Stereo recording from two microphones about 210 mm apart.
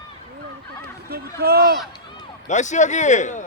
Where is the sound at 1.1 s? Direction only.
50° right (ahead or behind).